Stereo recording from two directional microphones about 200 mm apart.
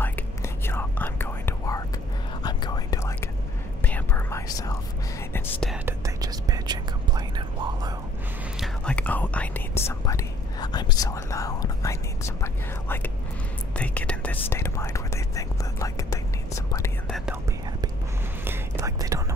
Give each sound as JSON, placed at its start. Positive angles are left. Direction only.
{"t": 0.7, "sound": "whispering", "side_deg": 10}
{"t": 5.7, "sound": "whispering", "side_deg": -15}
{"t": 8.5, "sound": "whispering", "side_deg": 5}
{"t": 18.4, "sound": "whispering", "side_deg": -15}